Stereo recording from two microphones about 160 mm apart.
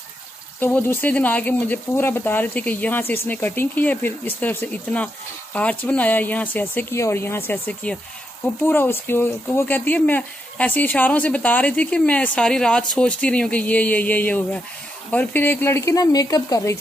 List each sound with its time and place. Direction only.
0.6 s speech: 10° left (ahead or behind)